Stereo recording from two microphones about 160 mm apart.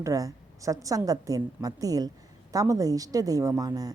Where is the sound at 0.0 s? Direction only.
20° right (ahead or behind).